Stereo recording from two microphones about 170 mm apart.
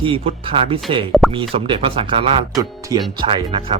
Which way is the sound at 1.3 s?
30° right (ahead or behind).